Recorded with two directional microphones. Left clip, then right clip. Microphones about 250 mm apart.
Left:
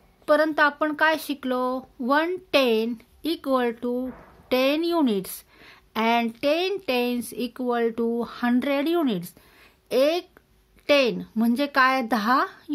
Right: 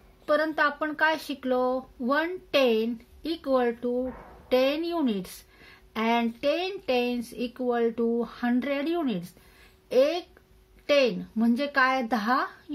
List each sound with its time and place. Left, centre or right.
0.2 s a woman's voice: left